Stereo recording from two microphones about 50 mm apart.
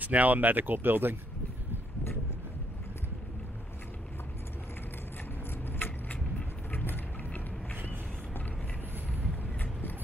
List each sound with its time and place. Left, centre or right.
0.0 s speech: right
5.8 s vehicle: left
6.7 s music: left
9.2 s vehicle: left